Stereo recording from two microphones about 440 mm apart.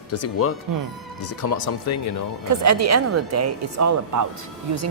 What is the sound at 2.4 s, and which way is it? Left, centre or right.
Speech, right.